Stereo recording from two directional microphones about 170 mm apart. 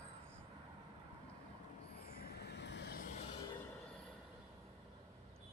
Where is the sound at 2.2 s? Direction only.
70° left (ahead or behind); by 2.9 s 85° left.